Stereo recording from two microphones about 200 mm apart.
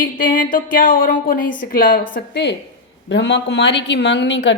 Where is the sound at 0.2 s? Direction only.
45° left (ahead or behind).